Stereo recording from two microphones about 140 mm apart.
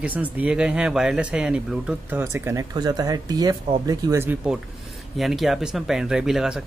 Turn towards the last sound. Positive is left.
turn(degrees=-5)  # may be behind; listen again after turning